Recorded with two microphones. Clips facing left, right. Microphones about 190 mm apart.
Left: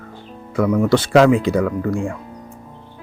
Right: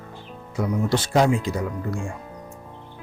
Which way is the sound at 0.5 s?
60° left (ahead or behind).